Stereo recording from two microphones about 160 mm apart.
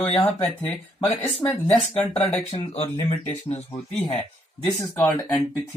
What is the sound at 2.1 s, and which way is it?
Speech, 40° left (ahead or behind).